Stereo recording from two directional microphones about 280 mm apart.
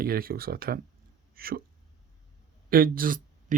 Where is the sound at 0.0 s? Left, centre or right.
Right.